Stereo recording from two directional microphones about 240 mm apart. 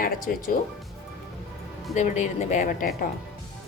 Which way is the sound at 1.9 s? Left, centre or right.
Left.